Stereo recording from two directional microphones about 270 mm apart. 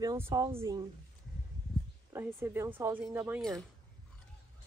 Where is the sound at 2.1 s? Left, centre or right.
Centre.